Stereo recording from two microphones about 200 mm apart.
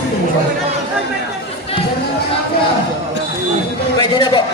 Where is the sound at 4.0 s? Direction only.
25° left (ahead or behind).